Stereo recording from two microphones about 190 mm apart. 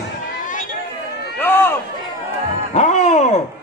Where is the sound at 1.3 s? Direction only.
10° left (ahead or behind).